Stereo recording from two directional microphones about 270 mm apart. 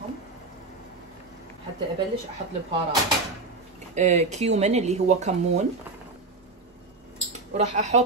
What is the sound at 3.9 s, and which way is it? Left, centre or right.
Speech, right.